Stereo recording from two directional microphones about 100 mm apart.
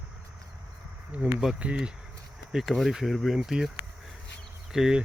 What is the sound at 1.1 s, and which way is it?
Speech, 10° right (ahead or behind).